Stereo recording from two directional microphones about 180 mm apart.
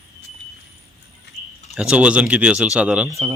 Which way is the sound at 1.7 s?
5° right (ahead or behind).